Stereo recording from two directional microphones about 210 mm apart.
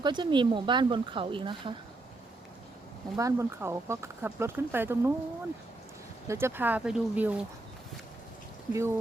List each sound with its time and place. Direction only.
0.0 s speech: 20° right (ahead or behind)
3.2 s speech: 15° right (ahead or behind)
6.2 s speech: 10° right (ahead or behind)
8.7 s speech: 10° right (ahead or behind)